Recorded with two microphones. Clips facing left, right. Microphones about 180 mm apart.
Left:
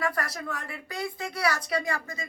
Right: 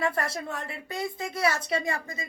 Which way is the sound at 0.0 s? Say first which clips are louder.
Right 2 dB; 25° right (ahead or behind).